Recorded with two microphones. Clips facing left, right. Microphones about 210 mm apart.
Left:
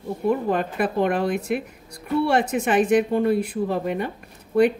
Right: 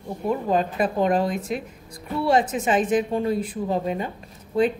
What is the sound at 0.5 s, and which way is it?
A woman's voice, 60° left (ahead or behind).